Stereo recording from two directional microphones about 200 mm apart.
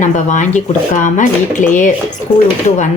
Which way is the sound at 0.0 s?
40° left (ahead or behind).